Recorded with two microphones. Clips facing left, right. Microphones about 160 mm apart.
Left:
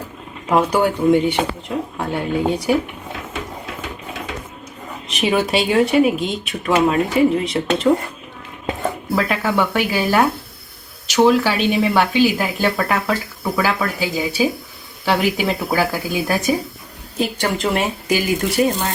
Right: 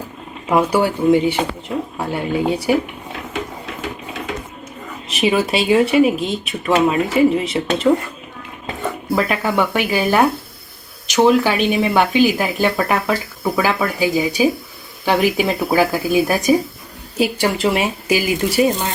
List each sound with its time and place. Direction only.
0.4 s speech: 5° right (ahead or behind)
5.1 s speech: centre (ahead or behind)
9.1 s speech: 10° right (ahead or behind)